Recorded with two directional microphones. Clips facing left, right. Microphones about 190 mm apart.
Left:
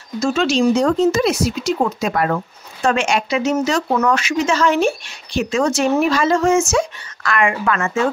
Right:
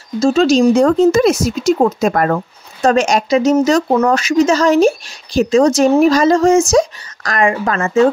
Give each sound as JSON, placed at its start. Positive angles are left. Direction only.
{"t": 0.2, "sound": "speech", "side_deg": -35}